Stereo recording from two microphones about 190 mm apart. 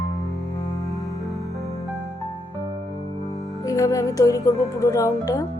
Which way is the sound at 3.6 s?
15° left (ahead or behind).